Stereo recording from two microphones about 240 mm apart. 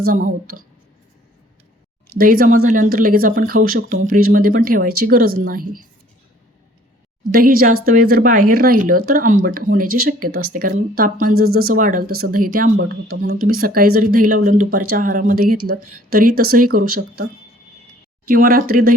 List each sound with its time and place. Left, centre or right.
0.1 s speech: right
2.1 s speech: right
7.3 s speech: right
18.3 s speech: right